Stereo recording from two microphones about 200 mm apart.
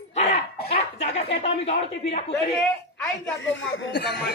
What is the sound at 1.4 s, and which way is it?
Speech, 30° left (ahead or behind).